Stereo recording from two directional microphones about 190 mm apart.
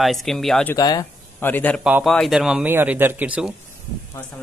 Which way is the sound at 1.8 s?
5° right (ahead or behind).